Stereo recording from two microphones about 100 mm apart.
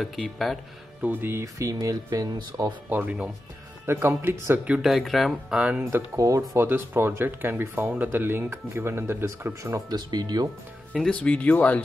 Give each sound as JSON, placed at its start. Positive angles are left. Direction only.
{"t": 0.2, "sound": "speech", "side_deg": 0}
{"t": 1.0, "sound": "speech", "side_deg": -20}
{"t": 1.4, "sound": "speech", "side_deg": -35}
{"t": 2.9, "sound": "speech", "side_deg": -15}
{"t": 4.6, "sound": "speech", "side_deg": -5}
{"t": 5.8, "sound": "speech", "side_deg": -25}
{"t": 9.9, "sound": "speech", "side_deg": -45}
{"t": 11.0, "sound": "speech", "side_deg": 10}